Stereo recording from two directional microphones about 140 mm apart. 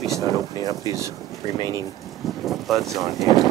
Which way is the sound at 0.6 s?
25° right (ahead or behind).